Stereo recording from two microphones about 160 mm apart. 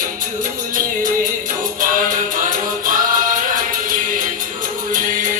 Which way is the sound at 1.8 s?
60° right (ahead or behind).